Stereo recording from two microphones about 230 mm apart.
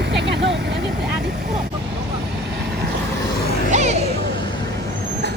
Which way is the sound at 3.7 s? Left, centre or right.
Right.